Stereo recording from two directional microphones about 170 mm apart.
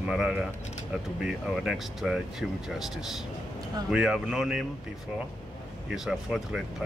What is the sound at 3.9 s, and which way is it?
Speech, 5° right (ahead or behind).